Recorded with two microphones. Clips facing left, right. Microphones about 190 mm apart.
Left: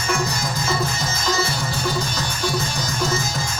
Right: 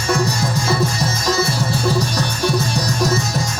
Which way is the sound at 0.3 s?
75° right (ahead or behind).